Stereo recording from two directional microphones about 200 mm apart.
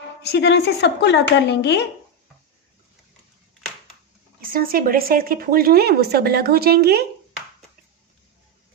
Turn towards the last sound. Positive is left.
turn(degrees=-50)  # may be behind; listen again after turning